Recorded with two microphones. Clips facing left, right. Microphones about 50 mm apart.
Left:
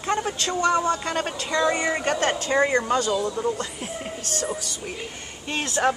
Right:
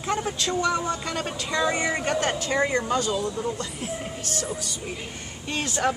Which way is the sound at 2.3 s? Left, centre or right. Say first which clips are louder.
Left 3 dB; left.